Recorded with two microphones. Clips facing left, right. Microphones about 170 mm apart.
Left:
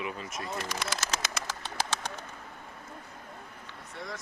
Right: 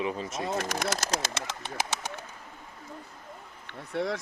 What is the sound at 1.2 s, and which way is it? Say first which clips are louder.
Bird: right 2 dB; 20° right (ahead or behind).